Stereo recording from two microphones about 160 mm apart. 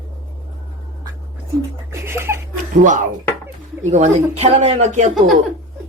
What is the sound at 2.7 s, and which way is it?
Speech, 50° right (ahead or behind).